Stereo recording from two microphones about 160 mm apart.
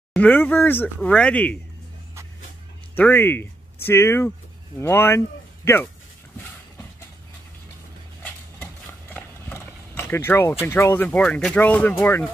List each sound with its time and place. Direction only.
0.1 s speech: 10° left (ahead or behind)
3.0 s speech: 15° left (ahead or behind)
9.1 s speech: 15° left (ahead or behind)